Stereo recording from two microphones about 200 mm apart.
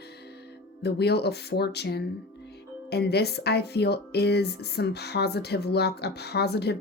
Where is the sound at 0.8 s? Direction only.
55° left (ahead or behind).